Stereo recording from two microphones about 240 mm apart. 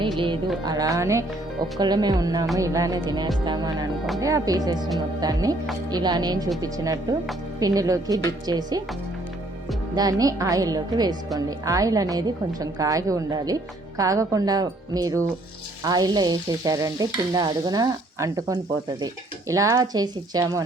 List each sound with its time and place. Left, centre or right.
0.2 s stir: centre
9.9 s stir: centre